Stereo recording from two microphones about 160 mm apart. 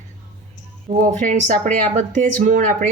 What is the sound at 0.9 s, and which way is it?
Speech, 55° right (ahead or behind).